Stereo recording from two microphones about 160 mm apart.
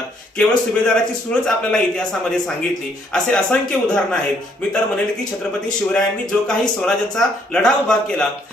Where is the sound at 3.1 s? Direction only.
5° left (ahead or behind).